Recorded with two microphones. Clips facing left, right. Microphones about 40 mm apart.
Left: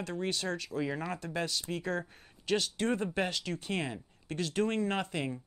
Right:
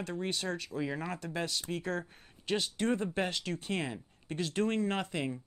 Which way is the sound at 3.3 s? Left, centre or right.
Right.